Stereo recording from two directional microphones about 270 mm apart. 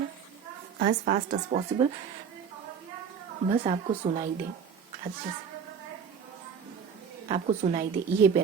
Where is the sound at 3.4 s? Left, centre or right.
Right.